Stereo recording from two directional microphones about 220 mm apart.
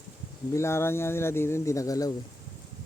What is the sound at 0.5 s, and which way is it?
Speech, 10° left (ahead or behind).